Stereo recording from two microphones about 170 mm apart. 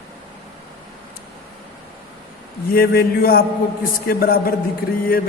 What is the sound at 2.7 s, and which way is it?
A man's voice, 65° left (ahead or behind).